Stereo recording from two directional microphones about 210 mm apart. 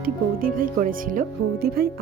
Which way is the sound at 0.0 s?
40° right (ahead or behind).